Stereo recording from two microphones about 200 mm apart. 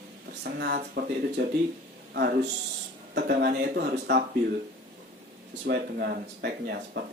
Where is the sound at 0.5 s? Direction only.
55° right (ahead or behind).